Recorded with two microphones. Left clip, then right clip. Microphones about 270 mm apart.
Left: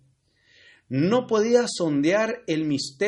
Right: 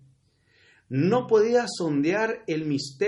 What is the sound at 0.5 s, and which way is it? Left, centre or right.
Speech, left.